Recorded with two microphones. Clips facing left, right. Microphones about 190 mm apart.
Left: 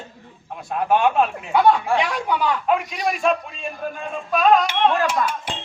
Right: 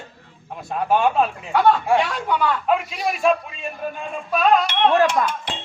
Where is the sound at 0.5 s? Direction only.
Centre (ahead or behind).